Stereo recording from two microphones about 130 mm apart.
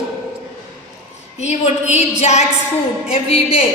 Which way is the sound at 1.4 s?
60° left (ahead or behind).